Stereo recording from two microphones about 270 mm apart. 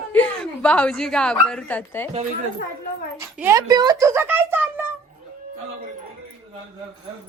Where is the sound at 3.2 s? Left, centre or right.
Centre.